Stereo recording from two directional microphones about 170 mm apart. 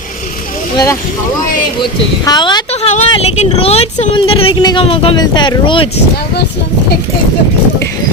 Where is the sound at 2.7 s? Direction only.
40° left (ahead or behind).